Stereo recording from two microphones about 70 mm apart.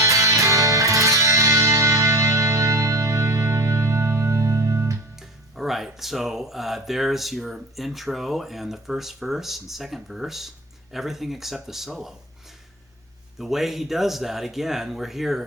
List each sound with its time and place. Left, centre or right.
0.0 s music: right
5.1 s speech: centre
13.4 s speech: centre